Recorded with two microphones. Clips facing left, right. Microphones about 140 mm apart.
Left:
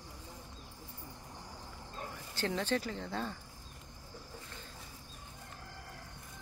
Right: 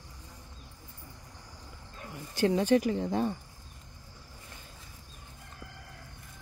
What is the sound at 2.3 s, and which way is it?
Speech, 15° right (ahead or behind).